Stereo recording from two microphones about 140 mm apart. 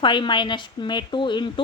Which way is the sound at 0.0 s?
35° left (ahead or behind).